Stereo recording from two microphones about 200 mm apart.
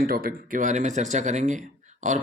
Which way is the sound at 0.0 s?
45° right (ahead or behind).